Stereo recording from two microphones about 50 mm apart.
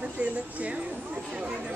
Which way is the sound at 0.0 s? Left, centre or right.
Right.